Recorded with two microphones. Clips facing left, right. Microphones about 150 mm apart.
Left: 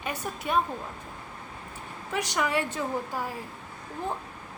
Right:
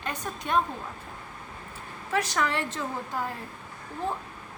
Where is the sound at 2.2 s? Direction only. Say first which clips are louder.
Left 3 dB; 15° left (ahead or behind).